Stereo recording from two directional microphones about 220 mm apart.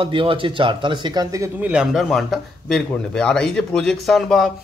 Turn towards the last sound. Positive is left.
turn(degrees=0)  # may be behind; listen again after turning